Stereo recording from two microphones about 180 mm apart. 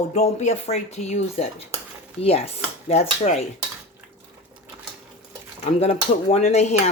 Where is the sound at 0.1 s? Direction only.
40° left (ahead or behind).